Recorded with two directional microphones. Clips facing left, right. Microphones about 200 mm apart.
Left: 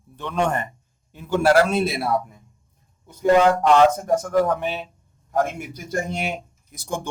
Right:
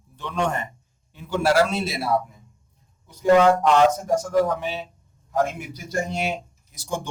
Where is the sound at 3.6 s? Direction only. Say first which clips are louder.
Left 2 dB; 55° left (ahead or behind).